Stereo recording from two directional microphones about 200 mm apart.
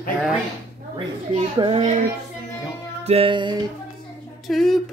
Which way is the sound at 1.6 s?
30° right (ahead or behind).